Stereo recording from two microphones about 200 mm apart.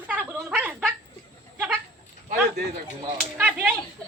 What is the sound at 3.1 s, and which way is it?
Speech, 5° right (ahead or behind).